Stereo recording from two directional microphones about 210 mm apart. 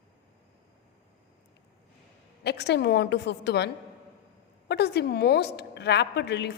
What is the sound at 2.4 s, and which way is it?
A woman's voice, 50° left (ahead or behind).